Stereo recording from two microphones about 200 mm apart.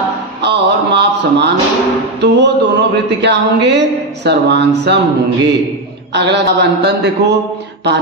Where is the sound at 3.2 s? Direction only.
60° right (ahead or behind).